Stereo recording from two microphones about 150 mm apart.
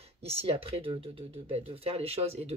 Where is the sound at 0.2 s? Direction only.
40° right (ahead or behind).